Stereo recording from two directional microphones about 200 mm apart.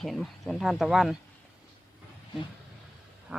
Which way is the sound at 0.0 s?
Centre (ahead or behind).